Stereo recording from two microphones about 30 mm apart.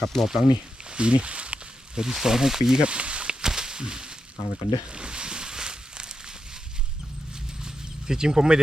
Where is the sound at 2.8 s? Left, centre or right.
Right.